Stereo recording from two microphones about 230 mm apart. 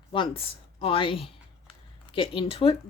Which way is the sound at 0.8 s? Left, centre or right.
Left.